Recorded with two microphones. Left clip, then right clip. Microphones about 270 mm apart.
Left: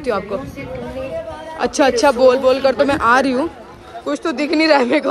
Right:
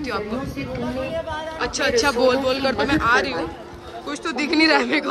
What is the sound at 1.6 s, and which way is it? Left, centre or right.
A woman's voice, centre.